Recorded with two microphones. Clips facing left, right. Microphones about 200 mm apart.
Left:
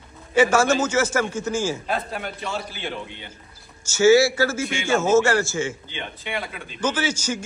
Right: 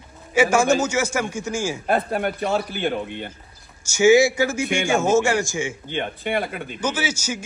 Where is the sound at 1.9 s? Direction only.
55° right (ahead or behind).